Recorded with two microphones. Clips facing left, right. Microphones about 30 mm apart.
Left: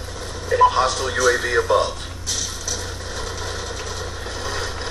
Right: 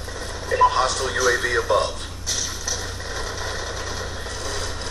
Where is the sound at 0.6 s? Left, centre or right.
Centre.